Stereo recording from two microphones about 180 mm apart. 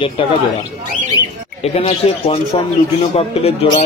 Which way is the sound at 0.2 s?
30° left (ahead or behind).